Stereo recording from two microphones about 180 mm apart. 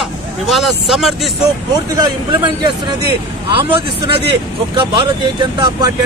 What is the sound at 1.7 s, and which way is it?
Speech, 25° right (ahead or behind).